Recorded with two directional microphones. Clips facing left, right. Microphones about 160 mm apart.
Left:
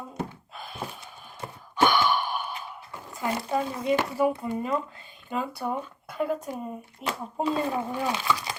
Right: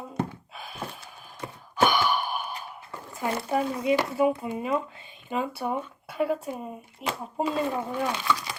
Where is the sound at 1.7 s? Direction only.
10° right (ahead or behind).